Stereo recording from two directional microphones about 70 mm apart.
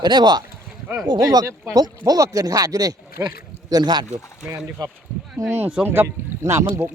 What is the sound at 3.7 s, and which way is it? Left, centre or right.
Speech, right.